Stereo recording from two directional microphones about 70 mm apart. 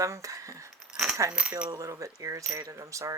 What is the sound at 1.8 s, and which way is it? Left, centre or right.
Speech, right.